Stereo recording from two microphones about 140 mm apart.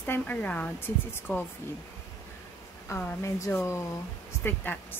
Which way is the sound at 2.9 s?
20° left (ahead or behind).